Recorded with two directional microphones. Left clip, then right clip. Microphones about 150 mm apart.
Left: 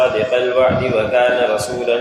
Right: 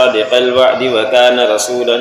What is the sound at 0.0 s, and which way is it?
A man's voice, 35° right (ahead or behind).